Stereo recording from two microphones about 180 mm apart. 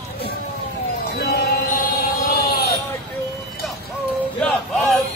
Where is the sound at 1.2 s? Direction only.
60° left (ahead or behind).